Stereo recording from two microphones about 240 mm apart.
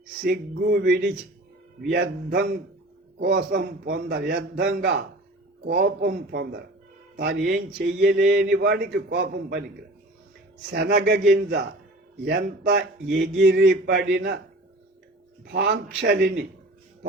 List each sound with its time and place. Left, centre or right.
0.3 s a man's voice: right
10.7 s a man's voice: right
15.5 s a man's voice: right